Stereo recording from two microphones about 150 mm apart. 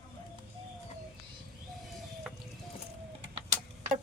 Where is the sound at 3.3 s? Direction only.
50° right (ahead or behind).